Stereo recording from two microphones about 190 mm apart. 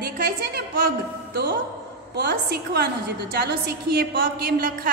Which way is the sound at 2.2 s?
55° right (ahead or behind).